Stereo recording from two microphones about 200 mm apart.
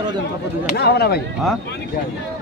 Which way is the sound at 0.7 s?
55° left (ahead or behind).